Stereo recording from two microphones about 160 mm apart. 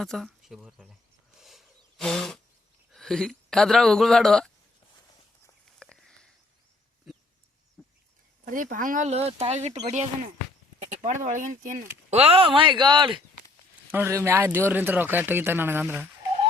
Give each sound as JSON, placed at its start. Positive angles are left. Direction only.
{"t": 0.0, "sound": "speech", "side_deg": 0}
{"t": 1.4, "sound": "wild animals", "side_deg": 0}
{"t": 2.9, "sound": "speech", "side_deg": 5}
{"t": 5.8, "sound": "sniff", "side_deg": 5}
{"t": 7.1, "sound": "dog", "side_deg": 0}
{"t": 7.8, "sound": "a sound", "side_deg": 5}
{"t": 8.4, "sound": "speech", "side_deg": -55}
{"t": 13.9, "sound": "speech", "side_deg": -15}